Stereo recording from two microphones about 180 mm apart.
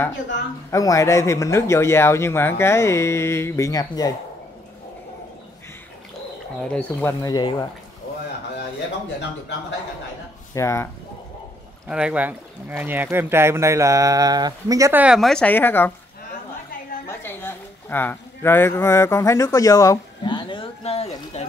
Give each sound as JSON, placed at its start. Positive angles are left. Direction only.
{"t": 0.7, "sound": "a man's voice", "side_deg": 20}
{"t": 6.7, "sound": "a man's voice", "side_deg": 10}
{"t": 10.5, "sound": "a man's voice", "side_deg": 15}
{"t": 11.9, "sound": "speech", "side_deg": -5}
{"t": 17.2, "sound": "speech", "side_deg": 10}